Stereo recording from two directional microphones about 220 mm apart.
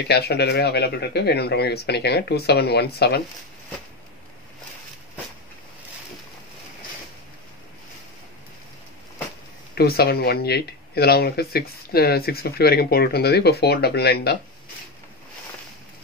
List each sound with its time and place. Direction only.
0.1 s speech: 45° left (ahead or behind)
9.8 s speech: 45° left (ahead or behind)